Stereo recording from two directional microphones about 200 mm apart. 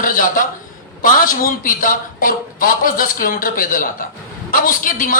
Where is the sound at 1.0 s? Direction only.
40° left (ahead or behind).